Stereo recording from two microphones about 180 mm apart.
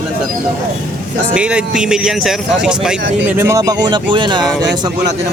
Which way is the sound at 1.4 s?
5° right (ahead or behind).